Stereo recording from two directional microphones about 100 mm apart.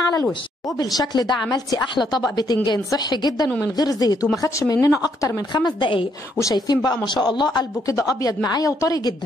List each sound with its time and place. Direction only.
0.7 s a woman's voice: 40° left (ahead or behind)